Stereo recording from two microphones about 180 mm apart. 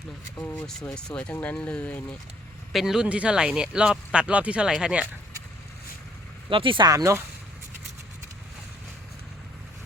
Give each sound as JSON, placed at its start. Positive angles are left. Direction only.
{"t": 0.3, "sound": "speech", "side_deg": 10}
{"t": 2.7, "sound": "speech", "side_deg": 0}
{"t": 6.5, "sound": "speech", "side_deg": -30}